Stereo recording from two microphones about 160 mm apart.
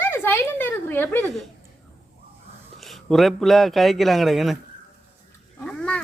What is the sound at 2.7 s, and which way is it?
A man's voice, centre (ahead or behind).